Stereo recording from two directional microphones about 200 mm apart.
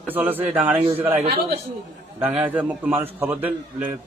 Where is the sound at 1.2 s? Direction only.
50° right (ahead or behind).